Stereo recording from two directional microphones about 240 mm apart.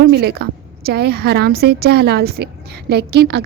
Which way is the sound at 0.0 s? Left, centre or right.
Right.